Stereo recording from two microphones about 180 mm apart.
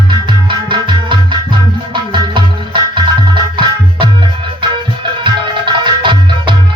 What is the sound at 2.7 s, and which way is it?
Music, 25° right (ahead or behind).